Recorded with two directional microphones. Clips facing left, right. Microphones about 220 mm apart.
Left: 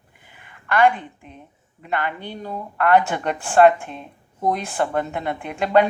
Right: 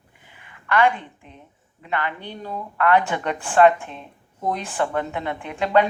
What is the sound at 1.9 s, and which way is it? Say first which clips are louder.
A woman's voice: left 1 dB; 40° left (ahead or behind).